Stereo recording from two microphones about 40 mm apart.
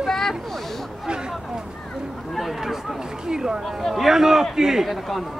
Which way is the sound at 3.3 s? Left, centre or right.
Centre.